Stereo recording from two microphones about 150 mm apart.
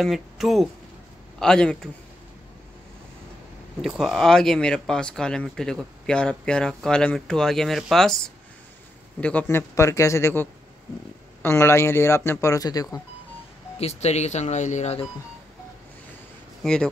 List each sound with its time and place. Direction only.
0.0 s speech: centre (ahead or behind)
3.8 s speech: centre (ahead or behind); by 12.8 s 25° left (ahead or behind)
13.7 s speech: 45° left (ahead or behind)
16.6 s speech: 5° left (ahead or behind)